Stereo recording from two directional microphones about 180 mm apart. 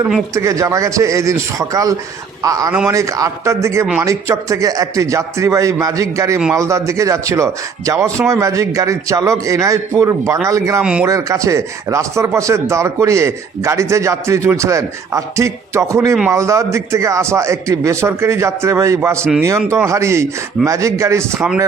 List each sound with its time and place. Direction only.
0.3 s speech: 15° right (ahead or behind)